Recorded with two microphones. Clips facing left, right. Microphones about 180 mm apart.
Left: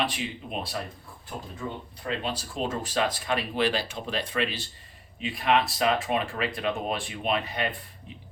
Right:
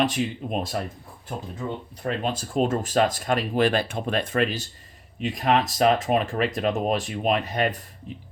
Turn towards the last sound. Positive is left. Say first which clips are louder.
# right 5 dB
turn(degrees=-45)  # may be behind; listen again after turning